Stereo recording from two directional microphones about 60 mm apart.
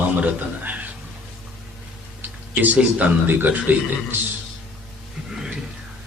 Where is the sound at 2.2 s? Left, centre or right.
Right.